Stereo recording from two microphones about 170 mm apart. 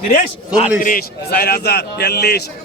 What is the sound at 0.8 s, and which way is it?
A man's voice, 60° left (ahead or behind).